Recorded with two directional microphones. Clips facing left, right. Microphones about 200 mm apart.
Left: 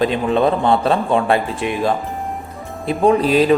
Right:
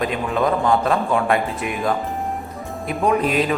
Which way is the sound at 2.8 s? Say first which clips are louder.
Left 5 dB; 30° left (ahead or behind).